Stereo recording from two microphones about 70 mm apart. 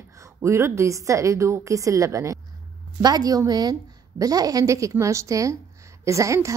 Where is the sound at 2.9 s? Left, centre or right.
Right.